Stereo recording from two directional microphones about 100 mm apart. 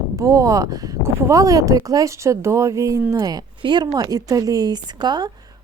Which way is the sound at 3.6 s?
50° right (ahead or behind).